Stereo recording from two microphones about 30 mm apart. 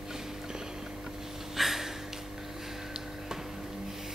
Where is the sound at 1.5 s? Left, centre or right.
Centre.